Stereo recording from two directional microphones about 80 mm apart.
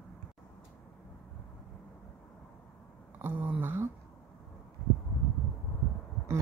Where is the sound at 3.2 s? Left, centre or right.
Right.